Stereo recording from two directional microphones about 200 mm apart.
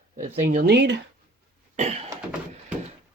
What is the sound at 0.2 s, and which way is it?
Speech, 45° right (ahead or behind).